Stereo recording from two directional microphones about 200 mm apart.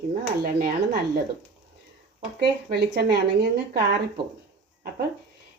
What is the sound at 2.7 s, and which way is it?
A woman's voice, 50° right (ahead or behind).